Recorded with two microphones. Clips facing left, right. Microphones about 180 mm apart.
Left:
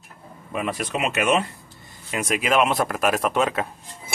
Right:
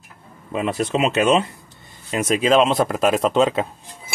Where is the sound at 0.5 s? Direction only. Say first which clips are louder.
Right 5 dB; 25° right (ahead or behind).